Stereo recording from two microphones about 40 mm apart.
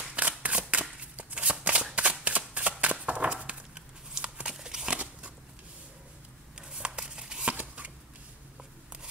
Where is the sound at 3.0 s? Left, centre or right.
Right.